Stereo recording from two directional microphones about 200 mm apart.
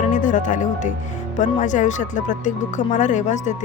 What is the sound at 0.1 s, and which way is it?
Speech, 40° left (ahead or behind).